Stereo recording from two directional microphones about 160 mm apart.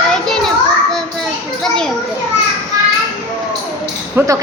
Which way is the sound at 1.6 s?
5° left (ahead or behind).